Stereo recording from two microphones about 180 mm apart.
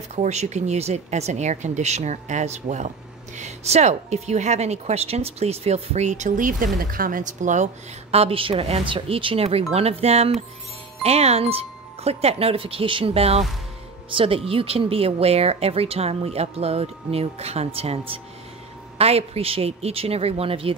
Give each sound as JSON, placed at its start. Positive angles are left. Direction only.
{"t": 0.1, "sound": "speech", "side_deg": -40}